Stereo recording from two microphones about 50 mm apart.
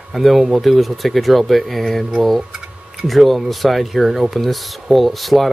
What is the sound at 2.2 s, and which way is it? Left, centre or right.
Speech, centre.